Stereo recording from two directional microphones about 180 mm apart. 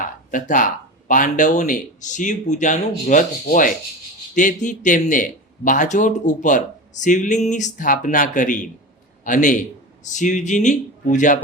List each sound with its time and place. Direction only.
0.3 s speech: 45° left (ahead or behind)